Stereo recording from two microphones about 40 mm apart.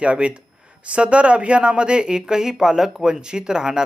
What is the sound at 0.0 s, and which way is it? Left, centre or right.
Speech, right.